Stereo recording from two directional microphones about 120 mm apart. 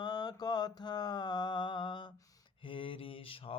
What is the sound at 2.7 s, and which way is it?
Mantra, 45° left (ahead or behind).